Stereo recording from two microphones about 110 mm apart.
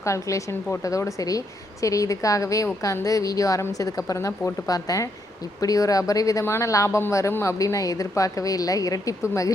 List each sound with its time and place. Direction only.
0.0 s a woman's voice: 30° left (ahead or behind)